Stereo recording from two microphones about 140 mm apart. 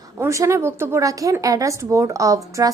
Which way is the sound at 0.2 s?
20° right (ahead or behind).